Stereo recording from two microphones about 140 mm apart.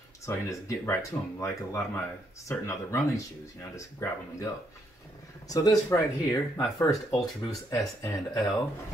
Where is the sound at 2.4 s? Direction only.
20° left (ahead or behind).